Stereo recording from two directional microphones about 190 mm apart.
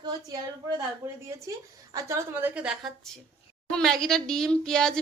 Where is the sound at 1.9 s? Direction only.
10° right (ahead or behind).